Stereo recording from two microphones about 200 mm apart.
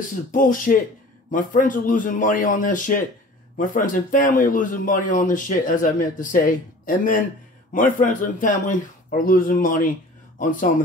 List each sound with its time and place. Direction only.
0.1 s a man's voice: 40° left (ahead or behind)
7.7 s speech: 40° left (ahead or behind)